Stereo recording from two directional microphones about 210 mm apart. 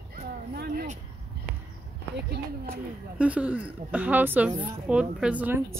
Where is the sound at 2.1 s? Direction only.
50° right (ahead or behind).